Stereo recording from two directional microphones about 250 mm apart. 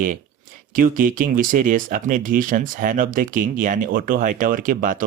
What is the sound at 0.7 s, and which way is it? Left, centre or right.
Speech, right.